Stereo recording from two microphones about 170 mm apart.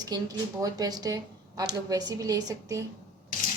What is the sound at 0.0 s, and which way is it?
Speech, 20° right (ahead or behind).